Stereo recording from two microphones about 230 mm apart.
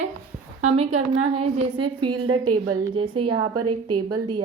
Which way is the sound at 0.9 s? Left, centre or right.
Right.